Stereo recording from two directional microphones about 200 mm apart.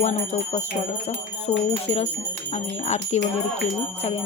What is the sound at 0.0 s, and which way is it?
Speech, 35° left (ahead or behind).